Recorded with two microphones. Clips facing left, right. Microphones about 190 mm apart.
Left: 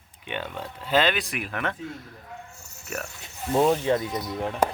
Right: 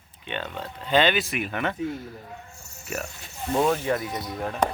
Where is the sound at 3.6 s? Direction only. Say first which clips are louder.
Left 2 dB; 25° left (ahead or behind).